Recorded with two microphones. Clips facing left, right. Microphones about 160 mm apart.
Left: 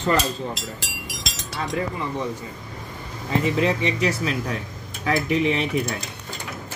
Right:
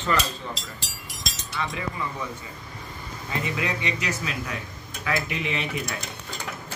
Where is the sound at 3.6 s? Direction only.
30° left (ahead or behind).